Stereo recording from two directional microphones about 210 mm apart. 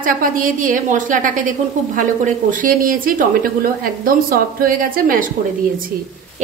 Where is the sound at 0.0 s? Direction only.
40° right (ahead or behind).